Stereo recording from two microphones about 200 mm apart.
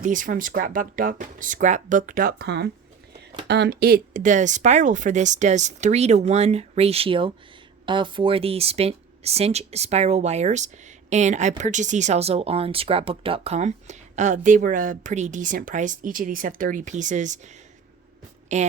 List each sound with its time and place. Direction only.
0.0 s speech: 40° right (ahead or behind)